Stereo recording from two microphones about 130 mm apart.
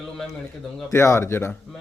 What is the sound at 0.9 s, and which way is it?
Speech, 20° left (ahead or behind).